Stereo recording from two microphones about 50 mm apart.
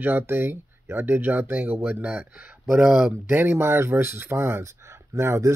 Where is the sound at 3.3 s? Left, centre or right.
Right.